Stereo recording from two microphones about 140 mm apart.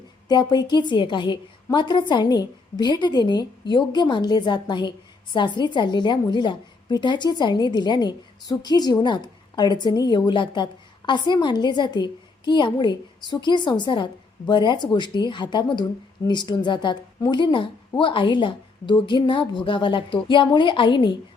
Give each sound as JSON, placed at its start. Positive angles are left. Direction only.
{"t": 0.3, "sound": "a woman's voice", "side_deg": 30}